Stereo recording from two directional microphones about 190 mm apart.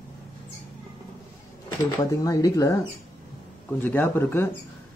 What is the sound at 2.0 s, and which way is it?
Speech, 20° left (ahead or behind).